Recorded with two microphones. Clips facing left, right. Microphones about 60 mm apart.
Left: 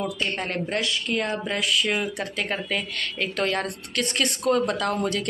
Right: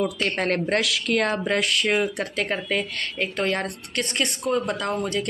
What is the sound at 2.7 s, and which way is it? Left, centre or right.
A woman's voice, right.